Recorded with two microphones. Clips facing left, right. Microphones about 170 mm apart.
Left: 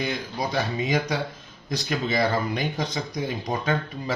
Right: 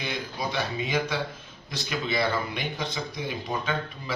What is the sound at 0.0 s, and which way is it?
A man's voice, 45° left (ahead or behind).